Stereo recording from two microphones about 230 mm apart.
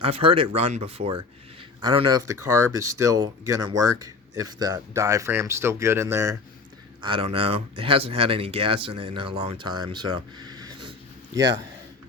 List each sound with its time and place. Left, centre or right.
0.0 s speech: right
7.0 s speech: right